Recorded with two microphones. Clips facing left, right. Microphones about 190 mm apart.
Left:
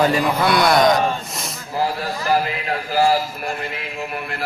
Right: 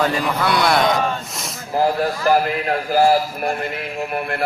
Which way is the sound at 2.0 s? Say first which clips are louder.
Right 3 dB; 45° right (ahead or behind).